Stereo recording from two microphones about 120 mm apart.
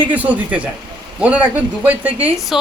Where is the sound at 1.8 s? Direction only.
15° right (ahead or behind).